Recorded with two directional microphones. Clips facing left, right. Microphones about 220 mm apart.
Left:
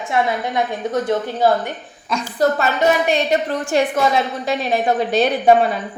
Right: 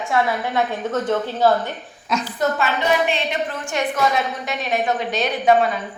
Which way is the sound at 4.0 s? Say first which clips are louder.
Left 3 dB; 30° left (ahead or behind).